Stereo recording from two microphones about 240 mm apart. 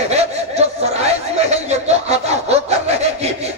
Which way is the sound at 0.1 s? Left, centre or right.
Right.